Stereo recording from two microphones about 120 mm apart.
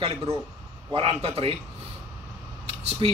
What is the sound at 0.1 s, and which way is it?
Speech, 30° right (ahead or behind).